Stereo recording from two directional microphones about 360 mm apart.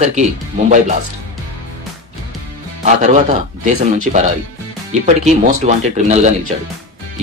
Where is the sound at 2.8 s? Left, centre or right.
Centre.